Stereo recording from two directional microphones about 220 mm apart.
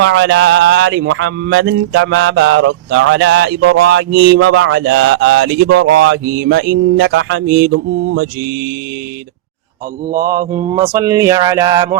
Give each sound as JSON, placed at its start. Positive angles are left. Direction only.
{"t": 0.0, "sound": "a sound", "side_deg": -55}
{"t": 10.1, "sound": "mantra", "side_deg": -40}
{"t": 10.9, "sound": "speech", "side_deg": -15}